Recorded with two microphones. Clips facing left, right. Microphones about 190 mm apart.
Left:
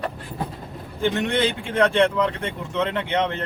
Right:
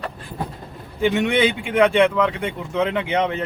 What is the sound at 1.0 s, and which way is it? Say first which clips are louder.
A man's voice: right 3 dB; 10° right (ahead or behind).